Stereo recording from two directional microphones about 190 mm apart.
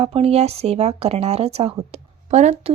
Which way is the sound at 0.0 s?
30° right (ahead or behind).